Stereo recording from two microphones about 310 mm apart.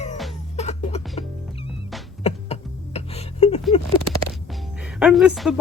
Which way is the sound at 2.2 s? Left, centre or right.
Centre.